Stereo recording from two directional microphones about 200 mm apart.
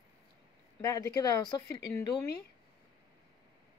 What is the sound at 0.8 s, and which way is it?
Speech, 15° left (ahead or behind).